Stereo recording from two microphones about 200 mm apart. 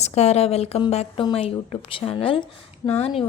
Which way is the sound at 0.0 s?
35° left (ahead or behind).